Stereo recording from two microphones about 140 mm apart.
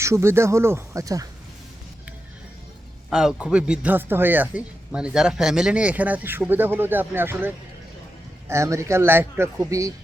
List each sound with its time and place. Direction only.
0.0 s speech: 20° right (ahead or behind)
3.1 s speech: 5° right (ahead or behind); by 9.9 s 25° right (ahead or behind)